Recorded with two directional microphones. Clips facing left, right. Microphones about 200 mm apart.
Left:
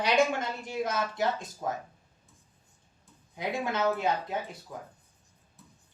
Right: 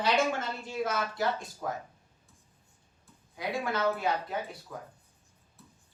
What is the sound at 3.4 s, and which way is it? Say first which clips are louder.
Speech: left 1 dB; 20° left (ahead or behind).